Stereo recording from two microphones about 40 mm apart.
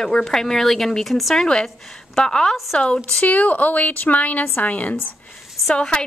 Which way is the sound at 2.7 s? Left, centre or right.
Left.